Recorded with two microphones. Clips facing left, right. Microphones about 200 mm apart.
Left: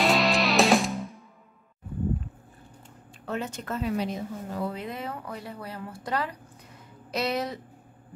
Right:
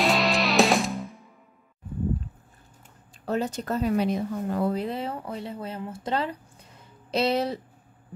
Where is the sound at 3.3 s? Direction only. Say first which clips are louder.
Right 5 dB; 35° right (ahead or behind).